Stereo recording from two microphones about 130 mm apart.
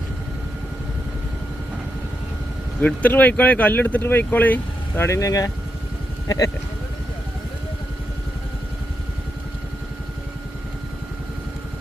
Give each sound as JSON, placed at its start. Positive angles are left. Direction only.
{"t": 2.8, "sound": "speech", "side_deg": 10}